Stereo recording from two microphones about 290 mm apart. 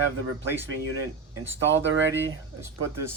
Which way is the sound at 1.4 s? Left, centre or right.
Right.